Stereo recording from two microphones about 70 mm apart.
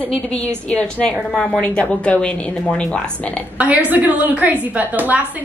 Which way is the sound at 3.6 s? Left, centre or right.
Right.